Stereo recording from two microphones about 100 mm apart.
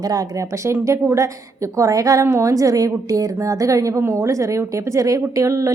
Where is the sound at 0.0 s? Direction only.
35° right (ahead or behind).